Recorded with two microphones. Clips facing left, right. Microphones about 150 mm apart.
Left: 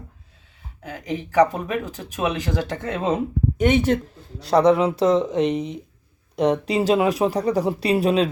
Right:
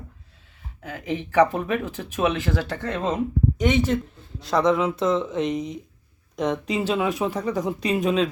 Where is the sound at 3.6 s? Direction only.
60° left (ahead or behind).